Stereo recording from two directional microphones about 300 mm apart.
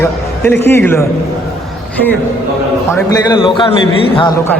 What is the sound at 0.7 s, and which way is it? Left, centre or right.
Speech, centre.